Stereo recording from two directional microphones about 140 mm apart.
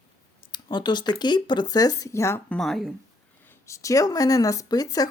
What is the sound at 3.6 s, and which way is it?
Speech, 20° left (ahead or behind).